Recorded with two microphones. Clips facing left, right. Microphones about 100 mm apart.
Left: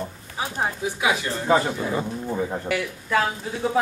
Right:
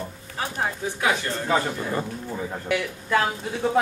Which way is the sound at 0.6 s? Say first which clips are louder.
Left 2 dB; 10° left (ahead or behind).